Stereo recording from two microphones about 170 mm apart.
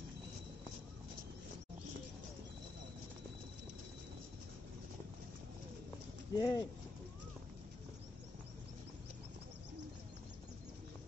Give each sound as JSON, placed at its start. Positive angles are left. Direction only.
{"t": 6.3, "sound": "speech", "side_deg": 20}